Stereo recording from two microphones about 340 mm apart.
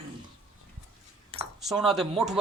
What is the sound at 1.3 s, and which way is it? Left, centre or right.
Cutlery, centre.